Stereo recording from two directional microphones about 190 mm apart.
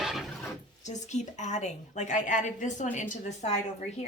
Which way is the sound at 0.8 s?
40° left (ahead or behind).